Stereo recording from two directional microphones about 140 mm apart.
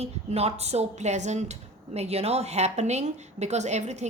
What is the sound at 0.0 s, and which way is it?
A woman's voice, 50° right (ahead or behind).